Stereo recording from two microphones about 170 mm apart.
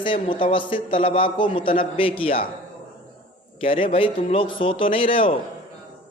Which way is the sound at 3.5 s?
35° left (ahead or behind).